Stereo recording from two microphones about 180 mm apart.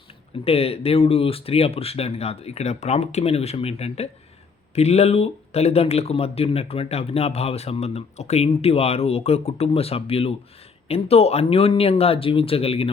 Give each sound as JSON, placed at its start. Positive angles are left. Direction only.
{"t": 0.4, "sound": "speech", "side_deg": 35}